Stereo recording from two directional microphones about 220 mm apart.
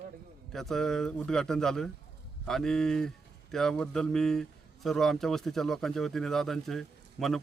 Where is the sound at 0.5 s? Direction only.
Centre (ahead or behind).